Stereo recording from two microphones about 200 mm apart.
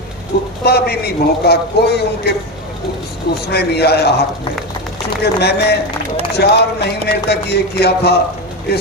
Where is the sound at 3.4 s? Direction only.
55° left (ahead or behind).